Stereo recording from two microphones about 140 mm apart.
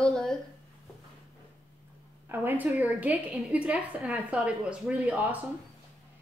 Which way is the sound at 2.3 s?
15° right (ahead or behind).